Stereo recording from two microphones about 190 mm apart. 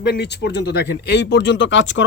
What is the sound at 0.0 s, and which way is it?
Speech, 60° left (ahead or behind).